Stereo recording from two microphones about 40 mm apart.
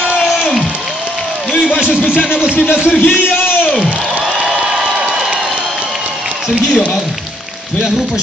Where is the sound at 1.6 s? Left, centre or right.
Right.